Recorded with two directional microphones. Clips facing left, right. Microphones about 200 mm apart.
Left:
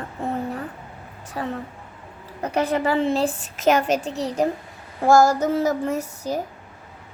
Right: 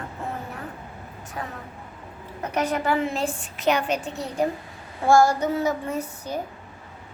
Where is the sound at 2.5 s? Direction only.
30° left (ahead or behind).